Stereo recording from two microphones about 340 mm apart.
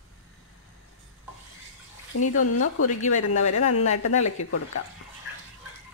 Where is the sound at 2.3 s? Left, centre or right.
Left.